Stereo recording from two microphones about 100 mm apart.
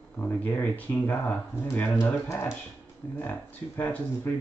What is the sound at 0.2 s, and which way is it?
Speech, 20° left (ahead or behind).